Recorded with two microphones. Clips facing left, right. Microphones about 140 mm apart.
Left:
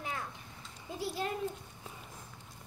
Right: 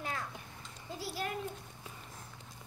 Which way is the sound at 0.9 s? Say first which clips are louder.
Left 3 dB; 20° left (ahead or behind).